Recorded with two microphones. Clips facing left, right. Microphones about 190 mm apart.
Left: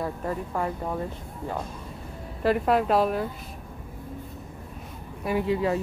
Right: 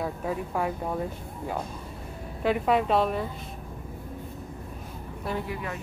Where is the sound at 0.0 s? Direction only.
5° right (ahead or behind).